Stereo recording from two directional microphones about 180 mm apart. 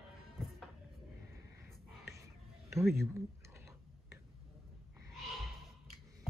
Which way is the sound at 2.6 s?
15° right (ahead or behind).